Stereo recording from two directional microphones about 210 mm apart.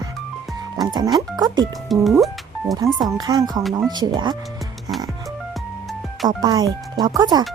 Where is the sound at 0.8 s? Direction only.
20° right (ahead or behind).